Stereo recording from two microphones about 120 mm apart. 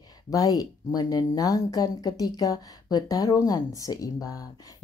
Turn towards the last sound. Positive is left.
turn(degrees=30)  # may be behind; listen again after turning